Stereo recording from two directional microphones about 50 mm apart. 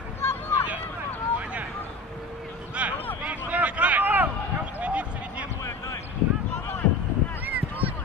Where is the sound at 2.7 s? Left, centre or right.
Right.